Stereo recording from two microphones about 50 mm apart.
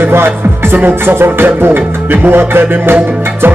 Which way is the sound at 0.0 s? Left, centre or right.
Right.